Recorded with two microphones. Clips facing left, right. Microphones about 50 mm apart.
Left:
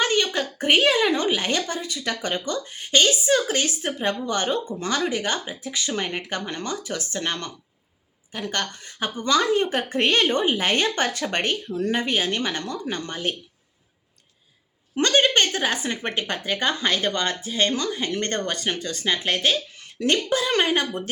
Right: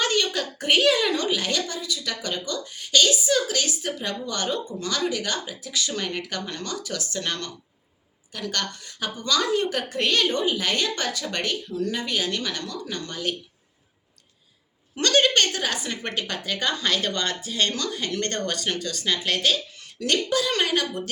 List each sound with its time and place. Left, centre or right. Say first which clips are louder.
0.0 s a woman's voice: left 2 dB; left
14.9 s a woman's voice: left 1 dB; left